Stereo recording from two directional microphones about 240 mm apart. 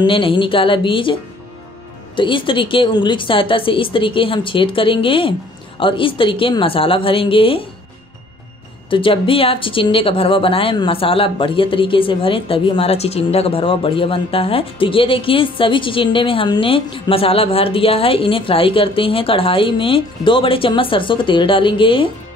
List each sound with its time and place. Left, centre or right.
0.0 s speech: left
2.1 s speech: left
8.9 s speech: left